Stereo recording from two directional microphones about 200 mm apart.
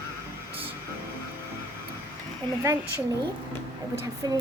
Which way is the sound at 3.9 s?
15° right (ahead or behind).